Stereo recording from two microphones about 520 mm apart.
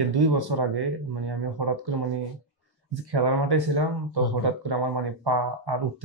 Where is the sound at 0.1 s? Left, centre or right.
Right.